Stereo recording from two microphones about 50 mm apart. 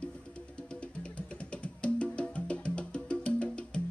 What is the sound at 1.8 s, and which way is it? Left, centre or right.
Music, left.